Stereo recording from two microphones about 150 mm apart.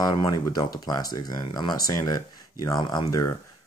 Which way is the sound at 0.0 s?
30° left (ahead or behind).